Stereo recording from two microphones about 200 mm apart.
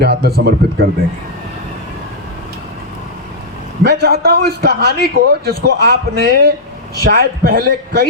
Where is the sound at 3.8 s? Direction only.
55° right (ahead or behind).